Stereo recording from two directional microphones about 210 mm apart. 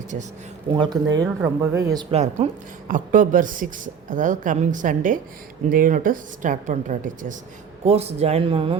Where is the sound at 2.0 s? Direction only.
30° right (ahead or behind).